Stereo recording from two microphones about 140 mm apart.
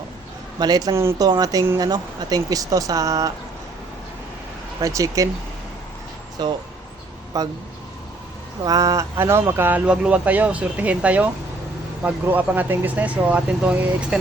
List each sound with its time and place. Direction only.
0.6 s speech: 30° right (ahead or behind)
4.8 s speech: 25° right (ahead or behind)
6.4 s speech: 30° right (ahead or behind)
8.6 s speech: 25° right (ahead or behind); by 14.2 s 10° right (ahead or behind)